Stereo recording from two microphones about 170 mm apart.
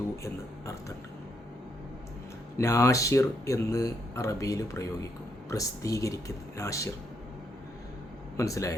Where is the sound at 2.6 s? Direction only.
20° left (ahead or behind).